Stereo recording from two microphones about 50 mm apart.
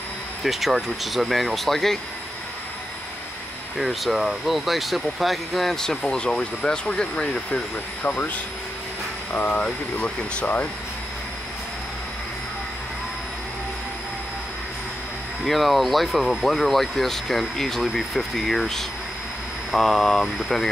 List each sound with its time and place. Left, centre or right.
0.4 s speech: centre
3.7 s speech: centre; by 7.6 s left
9.3 s speech: left
15.4 s speech: centre